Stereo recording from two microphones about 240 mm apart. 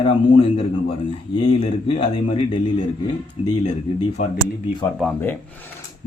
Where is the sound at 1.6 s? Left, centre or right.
Left.